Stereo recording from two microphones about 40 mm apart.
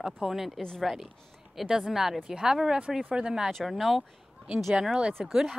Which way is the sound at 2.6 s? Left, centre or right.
Right.